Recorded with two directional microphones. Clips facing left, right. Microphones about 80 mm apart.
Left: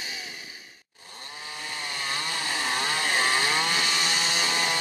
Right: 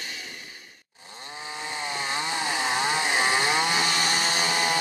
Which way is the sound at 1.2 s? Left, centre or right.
Right.